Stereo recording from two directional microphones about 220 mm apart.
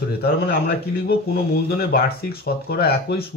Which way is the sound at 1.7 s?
45° left (ahead or behind).